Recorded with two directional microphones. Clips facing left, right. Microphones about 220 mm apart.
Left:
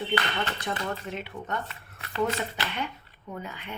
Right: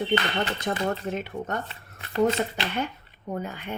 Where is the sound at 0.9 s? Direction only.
45° right (ahead or behind).